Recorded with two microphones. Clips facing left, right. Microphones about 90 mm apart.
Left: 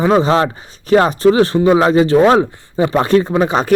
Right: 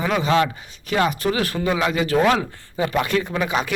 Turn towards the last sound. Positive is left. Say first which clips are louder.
# left 9 dB
turn(degrees=35)  # may be behind; listen again after turning